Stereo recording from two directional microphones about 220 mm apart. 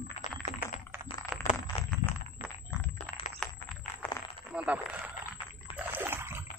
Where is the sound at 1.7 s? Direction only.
25° left (ahead or behind).